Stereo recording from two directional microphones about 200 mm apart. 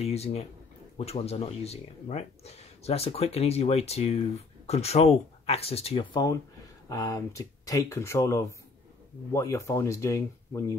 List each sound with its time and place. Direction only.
0.0 s speech: 30° left (ahead or behind); by 10.8 s 15° left (ahead or behind)